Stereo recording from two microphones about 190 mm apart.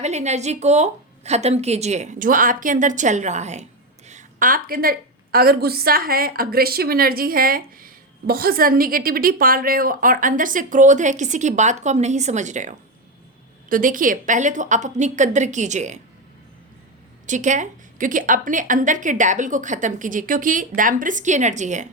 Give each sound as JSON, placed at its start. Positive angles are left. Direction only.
{"t": 0.0, "sound": "a woman's voice", "side_deg": -35}
{"t": 17.2, "sound": "a woman's voice", "side_deg": -40}